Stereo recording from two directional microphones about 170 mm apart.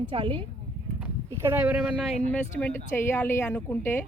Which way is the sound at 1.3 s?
15° right (ahead or behind).